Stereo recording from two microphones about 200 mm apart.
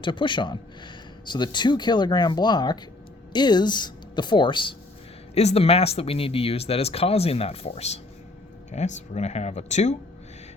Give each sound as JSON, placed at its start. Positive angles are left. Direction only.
{"t": 0.0, "sound": "speech", "side_deg": 25}